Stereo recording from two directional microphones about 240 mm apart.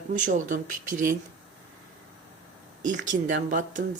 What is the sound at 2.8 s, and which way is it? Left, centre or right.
Speech, right.